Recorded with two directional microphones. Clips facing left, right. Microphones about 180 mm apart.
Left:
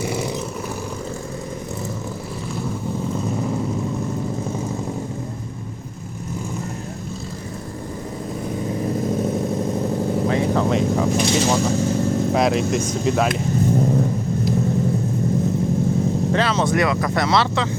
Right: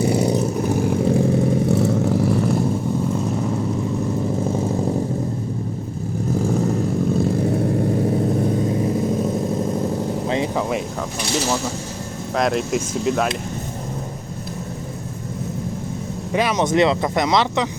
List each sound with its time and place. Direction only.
10.5 s vehicle: 5° right (ahead or behind)
12.4 s speech: centre (ahead or behind)
16.3 s speech: 15° right (ahead or behind)